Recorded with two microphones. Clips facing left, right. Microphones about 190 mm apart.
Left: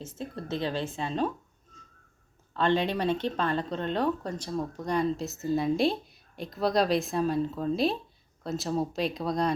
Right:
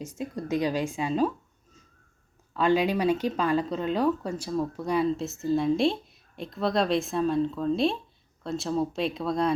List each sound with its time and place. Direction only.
0.0 s speech: 10° right (ahead or behind)
2.5 s speech: 10° right (ahead or behind)